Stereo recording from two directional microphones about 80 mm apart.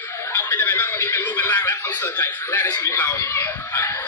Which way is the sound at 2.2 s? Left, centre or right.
Left.